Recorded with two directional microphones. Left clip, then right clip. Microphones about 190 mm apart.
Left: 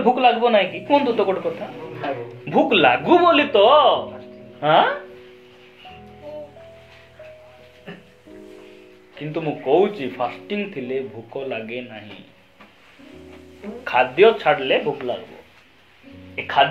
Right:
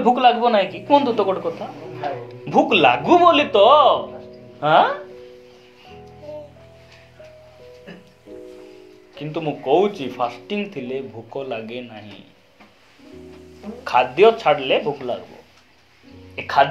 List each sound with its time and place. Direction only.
0.0 s speech: 30° right (ahead or behind)
2.4 s speech: 20° right (ahead or behind)
9.1 s speech: 25° right (ahead or behind)
13.8 s speech: 25° right (ahead or behind)